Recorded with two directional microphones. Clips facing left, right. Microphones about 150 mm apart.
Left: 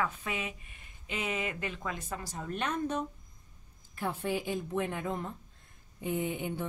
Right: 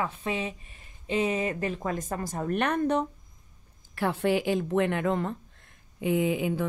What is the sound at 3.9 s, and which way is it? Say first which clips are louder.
Speech: right 8 dB; 85° right.